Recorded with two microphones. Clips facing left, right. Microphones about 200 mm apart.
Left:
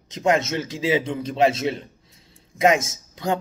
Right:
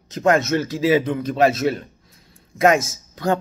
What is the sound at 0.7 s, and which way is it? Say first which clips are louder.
Speech: right 4 dB; 55° right (ahead or behind).